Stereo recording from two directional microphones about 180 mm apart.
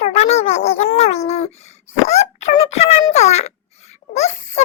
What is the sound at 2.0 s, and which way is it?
A child's voice, 40° left (ahead or behind).